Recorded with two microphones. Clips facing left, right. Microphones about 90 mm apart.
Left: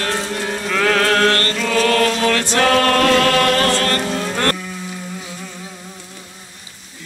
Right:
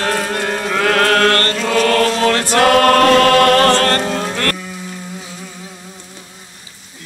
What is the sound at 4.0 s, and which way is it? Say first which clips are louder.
Music: right 2 dB; 40° right (ahead or behind).